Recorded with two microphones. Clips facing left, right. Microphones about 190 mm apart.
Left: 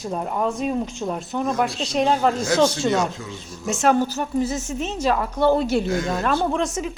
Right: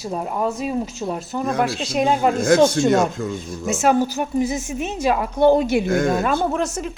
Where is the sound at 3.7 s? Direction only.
5° right (ahead or behind).